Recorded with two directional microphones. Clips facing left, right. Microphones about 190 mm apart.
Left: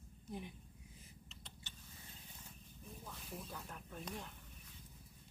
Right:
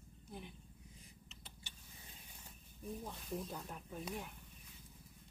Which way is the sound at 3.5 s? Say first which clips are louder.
Right 3 dB; 15° right (ahead or behind).